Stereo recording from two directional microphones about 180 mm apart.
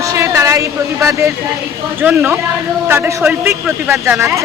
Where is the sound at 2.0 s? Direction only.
10° right (ahead or behind).